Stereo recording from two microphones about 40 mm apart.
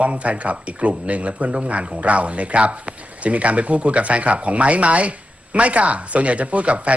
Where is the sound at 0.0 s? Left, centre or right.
Right.